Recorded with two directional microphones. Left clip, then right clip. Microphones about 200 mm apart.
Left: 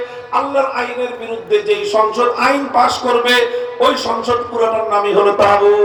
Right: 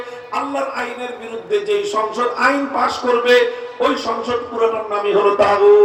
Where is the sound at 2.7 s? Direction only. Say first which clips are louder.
Left 4 dB; 55° left (ahead or behind).